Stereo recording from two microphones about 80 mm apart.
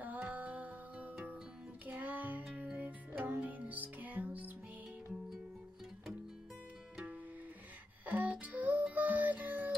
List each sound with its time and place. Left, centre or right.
0.0 s music: centre
8.0 s music: right